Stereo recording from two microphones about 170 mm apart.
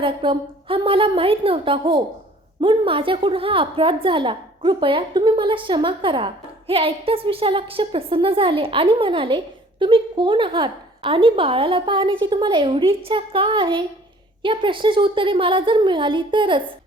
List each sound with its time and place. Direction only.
0.0 s a woman's voice: 30° right (ahead or behind)